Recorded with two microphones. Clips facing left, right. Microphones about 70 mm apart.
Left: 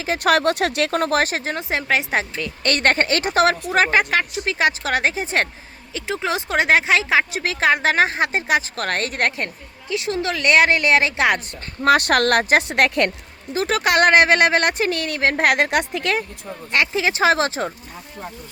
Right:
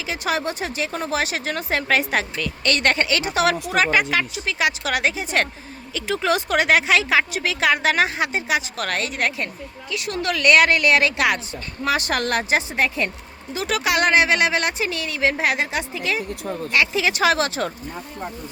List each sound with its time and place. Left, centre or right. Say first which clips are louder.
0.0 s speech: left 6 dB; left
1.5 s a woman's voice: even; left
2.6 s a woman's voice: left 2 dB; left
9.9 s a woman's voice: left 2 dB; left
11.8 s speech: left 6 dB; left
13.5 s speech: left 3 dB; left
16.7 s a woman's voice: left 1 dB; left